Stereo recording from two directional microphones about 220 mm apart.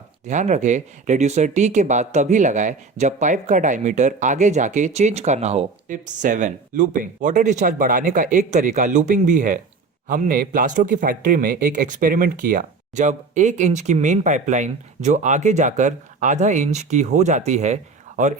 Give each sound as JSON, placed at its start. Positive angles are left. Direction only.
{"t": 0.3, "sound": "speech", "side_deg": -35}